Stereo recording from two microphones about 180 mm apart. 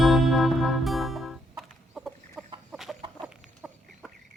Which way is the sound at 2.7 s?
Centre (ahead or behind).